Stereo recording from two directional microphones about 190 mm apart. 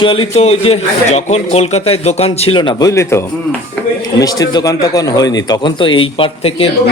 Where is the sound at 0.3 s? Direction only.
30° left (ahead or behind).